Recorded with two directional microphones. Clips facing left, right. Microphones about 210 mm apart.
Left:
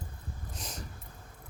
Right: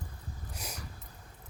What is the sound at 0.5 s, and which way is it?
Dog, 10° right (ahead or behind).